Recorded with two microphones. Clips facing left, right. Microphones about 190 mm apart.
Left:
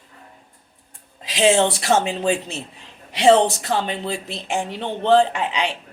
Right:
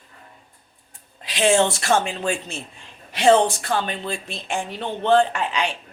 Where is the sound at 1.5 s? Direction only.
25° left (ahead or behind).